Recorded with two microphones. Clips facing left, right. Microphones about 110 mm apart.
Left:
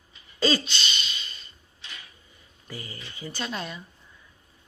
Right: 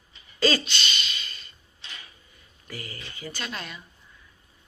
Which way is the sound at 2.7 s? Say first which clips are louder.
Even; 25° left (ahead or behind).